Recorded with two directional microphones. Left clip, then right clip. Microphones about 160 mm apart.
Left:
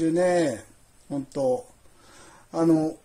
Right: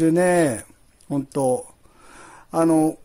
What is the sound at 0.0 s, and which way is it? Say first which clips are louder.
A man's voice: right 4 dB; 55° right (ahead or behind).